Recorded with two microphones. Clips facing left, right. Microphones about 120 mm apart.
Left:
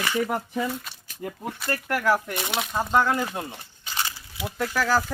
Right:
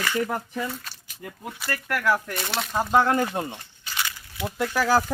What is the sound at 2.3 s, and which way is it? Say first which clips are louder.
Speech: even; 10° left (ahead or behind).